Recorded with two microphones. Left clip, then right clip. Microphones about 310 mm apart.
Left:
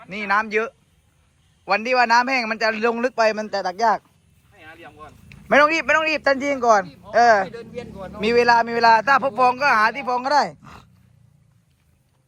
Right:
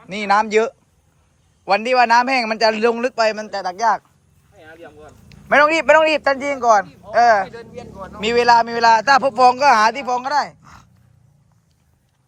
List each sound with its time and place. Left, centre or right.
0.1 s a man's voice: centre
3.8 s speech: centre
5.5 s a man's voice: centre
5.8 s a man's voice: centre
6.3 s speech: centre
7.1 s speech: centre
7.5 s speech: left
8.3 s a man's voice: centre
10.2 s speech: centre